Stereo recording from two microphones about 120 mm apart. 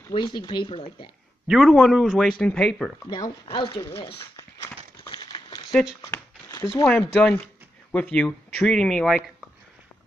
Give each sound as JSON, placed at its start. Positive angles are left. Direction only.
{"t": 0.1, "sound": "speech", "side_deg": 40}
{"t": 1.5, "sound": "speech", "side_deg": 0}
{"t": 3.4, "sound": "speech", "side_deg": 40}
{"t": 5.0, "sound": "a sound", "side_deg": 35}
{"t": 5.7, "sound": "speech", "side_deg": 0}
{"t": 6.0, "sound": "a sound", "side_deg": 20}
{"t": 6.9, "sound": "speech", "side_deg": 10}